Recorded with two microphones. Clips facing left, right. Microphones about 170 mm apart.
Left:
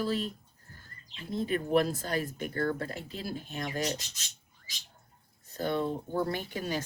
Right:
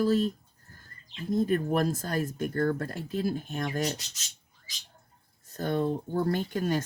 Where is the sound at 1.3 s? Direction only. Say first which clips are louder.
Right 2 dB; 45° right (ahead or behind).